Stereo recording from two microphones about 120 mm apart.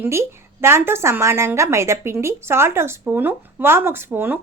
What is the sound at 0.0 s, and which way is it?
A woman's voice, 20° right (ahead or behind).